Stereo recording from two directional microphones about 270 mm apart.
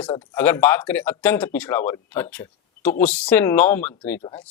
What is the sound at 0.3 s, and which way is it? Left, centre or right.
Speech, centre.